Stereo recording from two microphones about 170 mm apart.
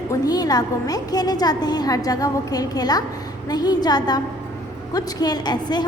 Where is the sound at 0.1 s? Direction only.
20° left (ahead or behind).